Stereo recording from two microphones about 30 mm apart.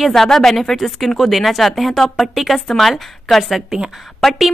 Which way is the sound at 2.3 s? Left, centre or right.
Centre.